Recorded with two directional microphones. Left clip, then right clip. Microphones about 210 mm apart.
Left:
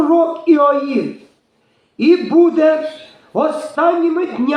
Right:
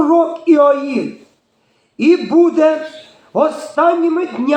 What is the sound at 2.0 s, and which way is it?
Speech, 25° right (ahead or behind).